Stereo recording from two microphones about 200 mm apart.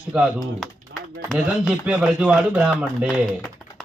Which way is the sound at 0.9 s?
50° right (ahead or behind).